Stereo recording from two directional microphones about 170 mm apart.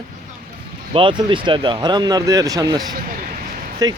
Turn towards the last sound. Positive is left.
turn(degrees=-20)  # may be behind; listen again after turning